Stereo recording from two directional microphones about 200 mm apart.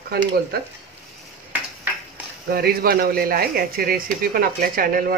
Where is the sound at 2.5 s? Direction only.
50° right (ahead or behind).